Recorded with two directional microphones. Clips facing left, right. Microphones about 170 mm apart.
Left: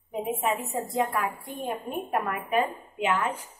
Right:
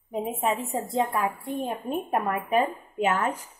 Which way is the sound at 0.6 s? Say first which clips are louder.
Right 1 dB; 30° right (ahead or behind).